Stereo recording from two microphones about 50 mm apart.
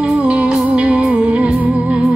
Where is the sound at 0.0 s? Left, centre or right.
Right.